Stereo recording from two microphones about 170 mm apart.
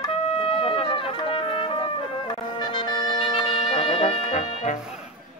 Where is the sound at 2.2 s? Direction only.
25° left (ahead or behind); by 4.7 s 40° left (ahead or behind).